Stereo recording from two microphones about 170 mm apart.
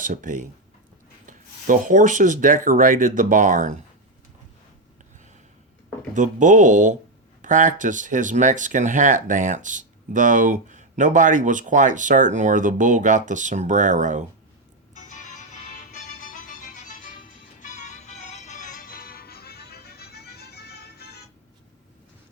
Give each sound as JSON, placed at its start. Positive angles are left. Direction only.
{"t": 0.0, "sound": "speech", "side_deg": -50}
{"t": 6.1, "sound": "speech", "side_deg": -45}
{"t": 15.1, "sound": "music", "side_deg": 45}